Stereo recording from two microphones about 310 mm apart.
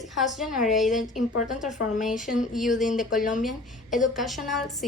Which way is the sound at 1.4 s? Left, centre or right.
Left.